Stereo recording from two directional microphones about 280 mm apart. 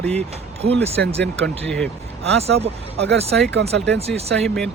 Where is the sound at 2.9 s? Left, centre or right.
Right.